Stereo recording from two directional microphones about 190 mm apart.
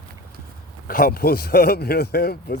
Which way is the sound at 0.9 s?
50° left (ahead or behind).